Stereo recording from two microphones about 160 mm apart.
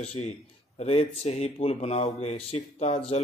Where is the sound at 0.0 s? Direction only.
40° left (ahead or behind).